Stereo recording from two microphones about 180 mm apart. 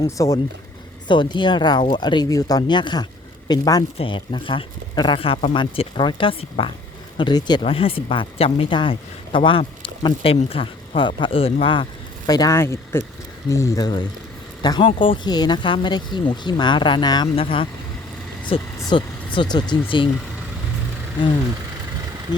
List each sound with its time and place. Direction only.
0.0 s speech: 20° left (ahead or behind)